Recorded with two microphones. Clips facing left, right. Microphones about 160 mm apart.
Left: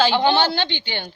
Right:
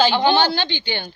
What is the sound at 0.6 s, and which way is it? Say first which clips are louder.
Speech: right 1 dB; 25° left (ahead or behind).